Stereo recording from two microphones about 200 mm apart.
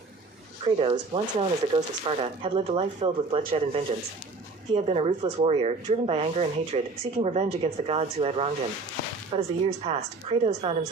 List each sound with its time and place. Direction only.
0.6 s speech: 30° right (ahead or behind)